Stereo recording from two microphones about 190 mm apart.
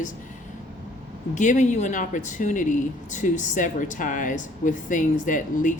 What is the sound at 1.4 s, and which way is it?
A woman's voice, 40° left (ahead or behind).